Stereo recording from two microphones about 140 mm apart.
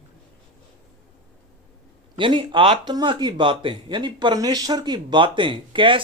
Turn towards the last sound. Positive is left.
turn(degrees=-35)  # may be behind; listen again after turning